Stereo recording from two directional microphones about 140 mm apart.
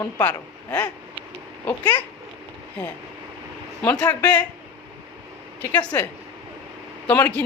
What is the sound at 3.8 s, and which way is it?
Speech, 10° left (ahead or behind).